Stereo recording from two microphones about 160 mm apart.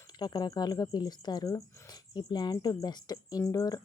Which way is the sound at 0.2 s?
25° left (ahead or behind).